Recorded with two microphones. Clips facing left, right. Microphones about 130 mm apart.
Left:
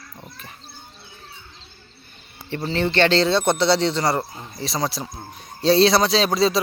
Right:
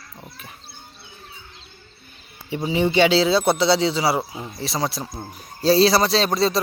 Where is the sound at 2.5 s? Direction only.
10° right (ahead or behind).